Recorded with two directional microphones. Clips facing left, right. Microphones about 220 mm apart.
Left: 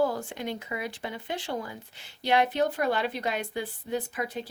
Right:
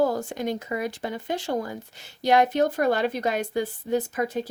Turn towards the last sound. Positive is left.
turn(degrees=-45)  # may be behind; listen again after turning